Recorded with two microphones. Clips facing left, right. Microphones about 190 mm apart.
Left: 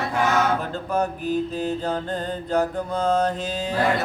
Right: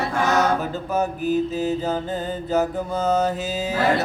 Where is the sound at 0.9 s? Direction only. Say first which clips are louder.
Right 2 dB; 5° right (ahead or behind).